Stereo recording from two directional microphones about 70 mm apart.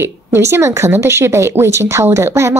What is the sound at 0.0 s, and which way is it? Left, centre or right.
Speech, right.